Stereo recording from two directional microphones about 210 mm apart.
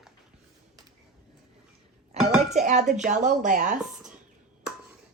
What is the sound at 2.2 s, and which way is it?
Dishes, centre (ahead or behind).